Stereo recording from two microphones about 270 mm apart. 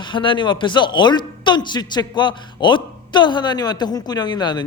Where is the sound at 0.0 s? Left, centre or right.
Centre.